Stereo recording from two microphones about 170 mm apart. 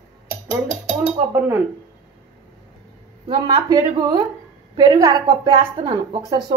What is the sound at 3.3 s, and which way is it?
Speech, 25° right (ahead or behind).